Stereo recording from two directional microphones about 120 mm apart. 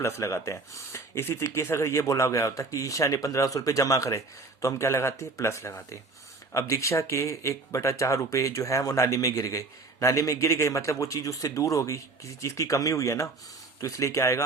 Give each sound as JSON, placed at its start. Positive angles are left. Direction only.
{"t": 0.0, "sound": "speech", "side_deg": 25}